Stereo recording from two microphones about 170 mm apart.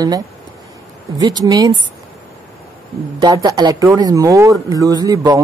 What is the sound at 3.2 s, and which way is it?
Speech, 20° right (ahead or behind).